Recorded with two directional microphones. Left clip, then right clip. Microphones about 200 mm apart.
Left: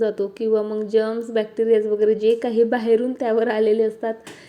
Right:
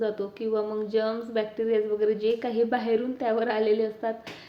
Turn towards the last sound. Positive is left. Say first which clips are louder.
# left 6 dB
turn(degrees=25)  # may be behind; listen again after turning